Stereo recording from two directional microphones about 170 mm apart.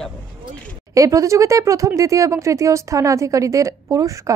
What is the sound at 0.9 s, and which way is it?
Speech, 20° right (ahead or behind).